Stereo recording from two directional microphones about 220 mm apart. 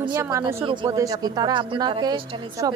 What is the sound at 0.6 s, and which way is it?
A woman's voice, 20° right (ahead or behind).